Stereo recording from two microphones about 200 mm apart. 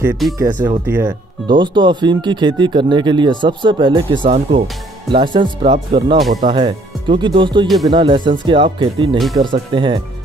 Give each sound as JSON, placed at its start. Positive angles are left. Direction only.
{"t": 0.4, "sound": "speech", "side_deg": -15}
{"t": 7.6, "sound": "speech", "side_deg": 0}
{"t": 7.9, "sound": "speech", "side_deg": -25}